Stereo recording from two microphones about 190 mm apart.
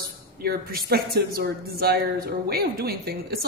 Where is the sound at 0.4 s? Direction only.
55° right (ahead or behind).